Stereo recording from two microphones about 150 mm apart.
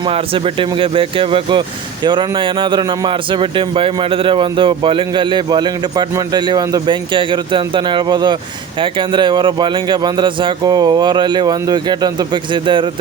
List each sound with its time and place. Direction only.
0.1 s a man's voice: 35° right (ahead or behind)